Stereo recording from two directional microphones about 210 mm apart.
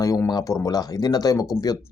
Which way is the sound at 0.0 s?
15° left (ahead or behind).